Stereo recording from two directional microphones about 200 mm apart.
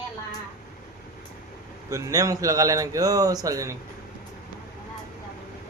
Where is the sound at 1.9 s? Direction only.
15° right (ahead or behind).